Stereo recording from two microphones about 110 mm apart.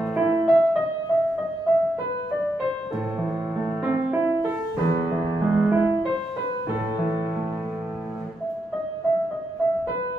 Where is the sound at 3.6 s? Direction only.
15° right (ahead or behind).